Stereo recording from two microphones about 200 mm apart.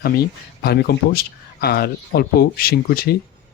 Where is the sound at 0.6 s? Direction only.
55° left (ahead or behind).